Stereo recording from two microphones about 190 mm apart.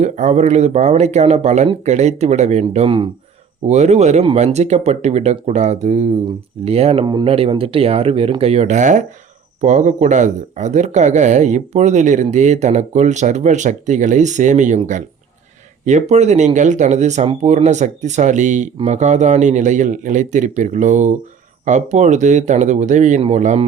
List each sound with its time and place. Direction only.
0.0 s speech: 35° right (ahead or behind)